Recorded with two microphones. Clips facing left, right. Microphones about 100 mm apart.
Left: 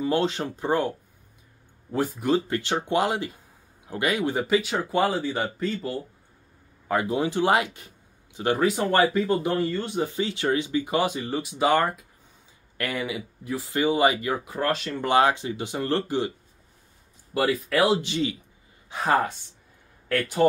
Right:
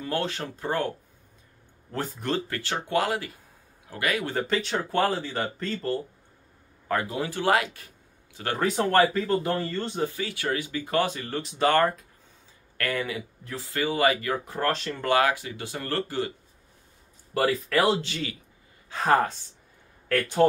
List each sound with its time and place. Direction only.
0.0 s speech: 20° left (ahead or behind)
8.5 s speech: 5° left (ahead or behind)
8.9 s speech: 15° left (ahead or behind)
14.4 s speech: 5° left (ahead or behind)
15.0 s speech: 25° left (ahead or behind)
17.3 s speech: 10° left (ahead or behind)
18.0 s speech: 20° left (ahead or behind)